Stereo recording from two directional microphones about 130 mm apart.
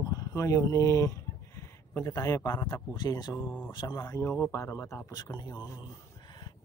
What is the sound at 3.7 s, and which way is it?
Speech, 30° left (ahead or behind).